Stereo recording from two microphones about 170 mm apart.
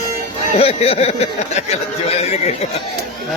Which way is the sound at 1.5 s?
40° left (ahead or behind).